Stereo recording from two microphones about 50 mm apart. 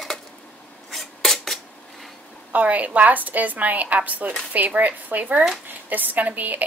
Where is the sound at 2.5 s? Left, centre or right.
Right.